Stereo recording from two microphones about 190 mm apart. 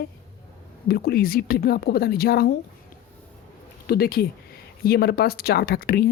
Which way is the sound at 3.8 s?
55° left (ahead or behind).